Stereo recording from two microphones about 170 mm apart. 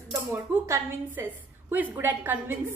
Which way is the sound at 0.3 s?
15° right (ahead or behind).